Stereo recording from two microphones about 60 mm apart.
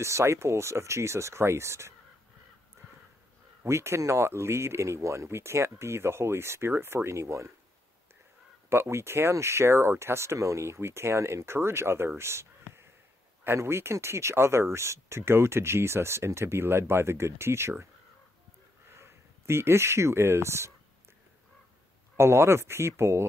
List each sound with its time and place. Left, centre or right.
0.0 s speech: right
3.6 s speech: right
8.6 s speech: right
12.2 s a sound: right
13.6 s speech: right
18.9 s speech: right
22.1 s speech: right